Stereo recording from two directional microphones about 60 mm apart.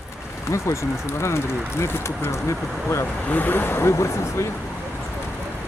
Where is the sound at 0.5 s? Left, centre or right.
Left.